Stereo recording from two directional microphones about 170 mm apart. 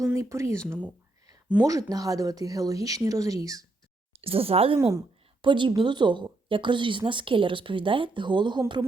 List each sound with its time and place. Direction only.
0.0 s speech: 15° right (ahead or behind)
1.5 s a woman's voice: 20° right (ahead or behind)
4.2 s speech: 35° right (ahead or behind)
4.8 s a woman's voice: 20° right (ahead or behind)
5.4 s a woman's voice: 30° right (ahead or behind)